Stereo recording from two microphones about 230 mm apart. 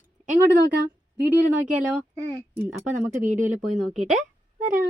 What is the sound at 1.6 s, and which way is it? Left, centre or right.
Speech, centre.